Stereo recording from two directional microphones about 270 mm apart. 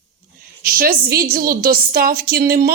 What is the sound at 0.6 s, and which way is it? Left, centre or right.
A woman's voice, right.